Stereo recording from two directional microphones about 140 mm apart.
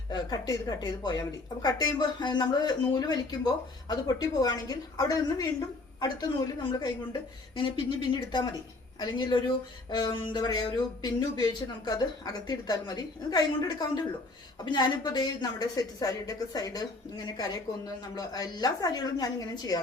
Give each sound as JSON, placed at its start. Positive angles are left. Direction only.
{"t": 0.1, "sound": "a woman's voice", "side_deg": 30}